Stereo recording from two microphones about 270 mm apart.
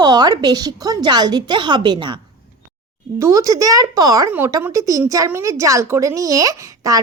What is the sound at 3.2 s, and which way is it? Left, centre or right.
A woman's voice, centre.